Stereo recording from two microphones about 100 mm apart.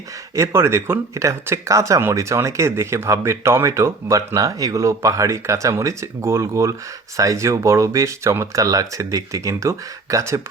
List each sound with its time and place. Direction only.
0.3 s speech: 25° right (ahead or behind)